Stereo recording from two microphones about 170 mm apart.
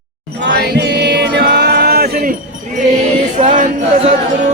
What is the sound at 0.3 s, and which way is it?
Music, 80° right.